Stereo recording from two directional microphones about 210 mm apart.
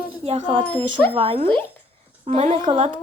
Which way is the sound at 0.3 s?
25° right (ahead or behind).